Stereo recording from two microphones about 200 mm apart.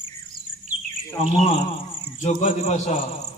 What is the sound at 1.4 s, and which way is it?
Speech, 35° left (ahead or behind).